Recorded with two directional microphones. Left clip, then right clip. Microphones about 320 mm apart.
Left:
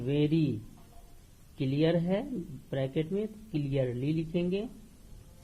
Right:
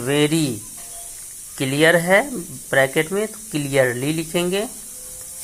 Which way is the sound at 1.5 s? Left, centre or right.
Right.